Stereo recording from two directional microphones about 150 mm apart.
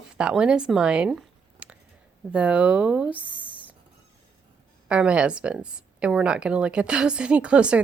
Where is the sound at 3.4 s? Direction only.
35° left (ahead or behind).